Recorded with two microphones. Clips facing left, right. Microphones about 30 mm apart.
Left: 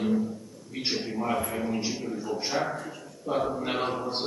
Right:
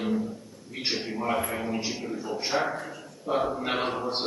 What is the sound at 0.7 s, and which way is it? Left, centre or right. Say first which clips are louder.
A man's voice: even; centre.